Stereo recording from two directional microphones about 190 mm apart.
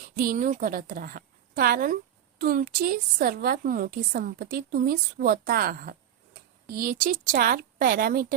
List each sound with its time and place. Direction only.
0.2 s a woman's voice: 50° right (ahead or behind)